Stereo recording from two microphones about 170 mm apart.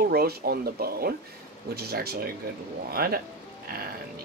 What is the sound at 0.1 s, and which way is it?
Speech, 65° right (ahead or behind).